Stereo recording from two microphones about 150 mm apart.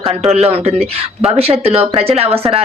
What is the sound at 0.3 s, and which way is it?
Speech, 45° right (ahead or behind).